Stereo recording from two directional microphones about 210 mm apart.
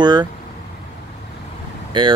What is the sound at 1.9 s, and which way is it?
Speech, 25° right (ahead or behind).